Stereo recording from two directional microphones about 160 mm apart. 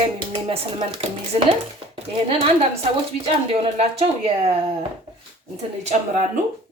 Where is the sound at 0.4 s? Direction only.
40° right (ahead or behind).